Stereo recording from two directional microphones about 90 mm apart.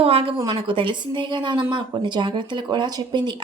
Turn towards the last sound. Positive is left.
turn(degrees=-55)  # may be behind; listen again after turning